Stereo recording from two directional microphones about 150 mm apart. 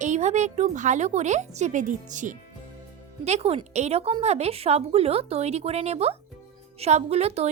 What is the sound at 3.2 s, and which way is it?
A child's voice, 45° right (ahead or behind).